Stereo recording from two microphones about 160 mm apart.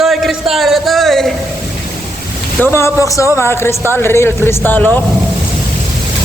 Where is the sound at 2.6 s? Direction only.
15° left (ahead or behind).